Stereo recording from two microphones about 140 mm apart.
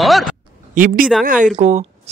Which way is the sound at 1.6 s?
55° right (ahead or behind).